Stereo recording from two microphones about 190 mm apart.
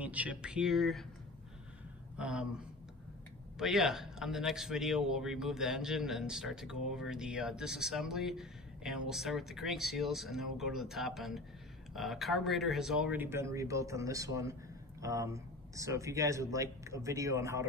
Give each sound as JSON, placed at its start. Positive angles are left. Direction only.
{"t": 0.0, "sound": "a man's voice", "side_deg": -5}
{"t": 2.1, "sound": "a man's voice", "side_deg": -5}